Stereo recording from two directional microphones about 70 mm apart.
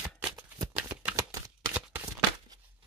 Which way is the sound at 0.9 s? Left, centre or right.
Right.